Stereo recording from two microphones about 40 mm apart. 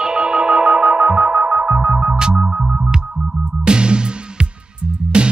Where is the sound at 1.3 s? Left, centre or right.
Right.